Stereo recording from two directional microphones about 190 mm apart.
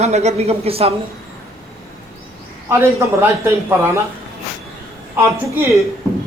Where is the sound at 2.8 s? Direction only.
10° right (ahead or behind).